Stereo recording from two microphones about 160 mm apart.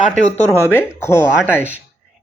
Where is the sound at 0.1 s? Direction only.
10° left (ahead or behind).